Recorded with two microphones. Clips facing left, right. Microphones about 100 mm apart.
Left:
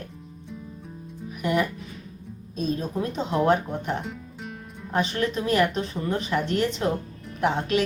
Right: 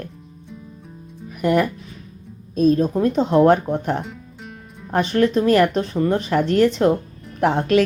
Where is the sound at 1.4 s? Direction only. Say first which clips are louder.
Right 6 dB; 45° right (ahead or behind).